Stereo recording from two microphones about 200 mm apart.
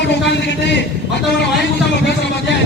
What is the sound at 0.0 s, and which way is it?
Speech, 60° left (ahead or behind).